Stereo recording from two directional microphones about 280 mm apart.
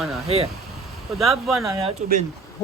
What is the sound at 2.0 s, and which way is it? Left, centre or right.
Speech, right.